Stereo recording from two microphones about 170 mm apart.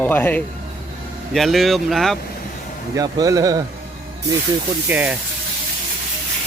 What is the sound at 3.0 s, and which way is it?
Speech, 20° right (ahead or behind).